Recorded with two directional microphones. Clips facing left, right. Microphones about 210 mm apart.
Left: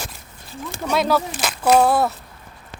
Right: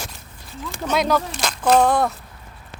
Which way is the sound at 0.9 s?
5° left (ahead or behind).